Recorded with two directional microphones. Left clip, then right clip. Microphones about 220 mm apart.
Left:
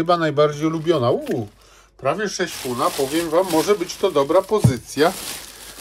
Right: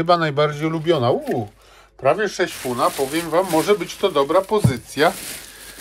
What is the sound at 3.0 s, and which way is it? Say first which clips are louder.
Speech: left 1 dB; centre (ahead or behind).